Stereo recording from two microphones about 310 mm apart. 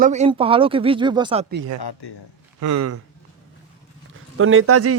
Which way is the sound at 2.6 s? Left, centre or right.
Right.